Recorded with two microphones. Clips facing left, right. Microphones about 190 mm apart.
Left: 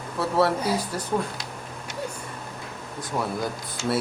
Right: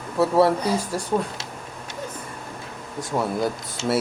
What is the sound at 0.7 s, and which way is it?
Speech, 10° left (ahead or behind).